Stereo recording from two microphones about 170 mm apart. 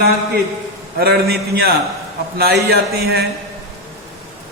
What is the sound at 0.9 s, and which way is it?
A woman's voice, 65° right (ahead or behind).